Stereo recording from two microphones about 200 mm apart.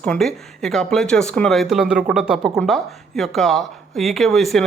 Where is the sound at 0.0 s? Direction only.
5° left (ahead or behind).